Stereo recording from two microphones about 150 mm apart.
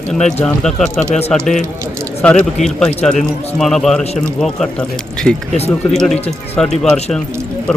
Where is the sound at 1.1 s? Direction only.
45° left (ahead or behind).